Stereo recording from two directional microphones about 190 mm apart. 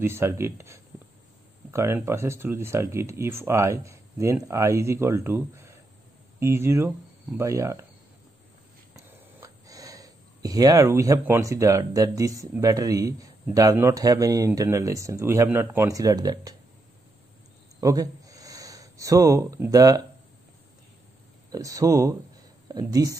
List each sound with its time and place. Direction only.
0.0 s speech: 10° right (ahead or behind)
8.9 s speech: 20° right (ahead or behind)
17.7 s speech: 20° right (ahead or behind)
21.5 s speech: 20° right (ahead or behind)